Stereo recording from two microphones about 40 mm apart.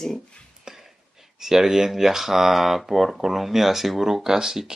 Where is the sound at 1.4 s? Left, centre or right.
Centre.